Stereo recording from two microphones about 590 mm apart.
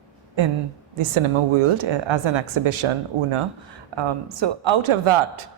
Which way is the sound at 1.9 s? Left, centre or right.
Right.